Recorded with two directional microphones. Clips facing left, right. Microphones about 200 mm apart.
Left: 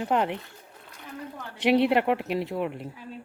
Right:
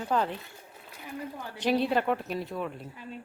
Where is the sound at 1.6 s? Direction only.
20° left (ahead or behind).